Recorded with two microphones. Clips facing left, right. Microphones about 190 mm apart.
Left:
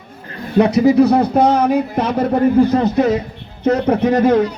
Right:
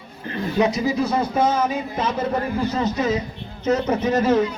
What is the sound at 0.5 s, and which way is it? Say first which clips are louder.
A man's voice: left 9 dB; 60° left (ahead or behind).